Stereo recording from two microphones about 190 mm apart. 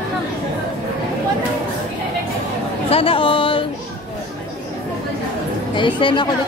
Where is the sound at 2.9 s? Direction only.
30° left (ahead or behind).